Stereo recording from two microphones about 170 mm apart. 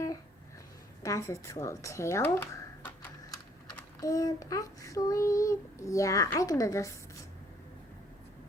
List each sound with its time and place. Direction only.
1.0 s speech: 20° left (ahead or behind)
3.8 s child singing: 20° left (ahead or behind)